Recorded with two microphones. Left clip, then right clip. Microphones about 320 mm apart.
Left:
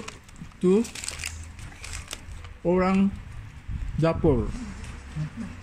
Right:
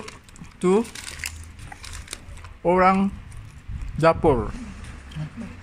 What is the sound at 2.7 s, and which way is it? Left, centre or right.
Speech, right.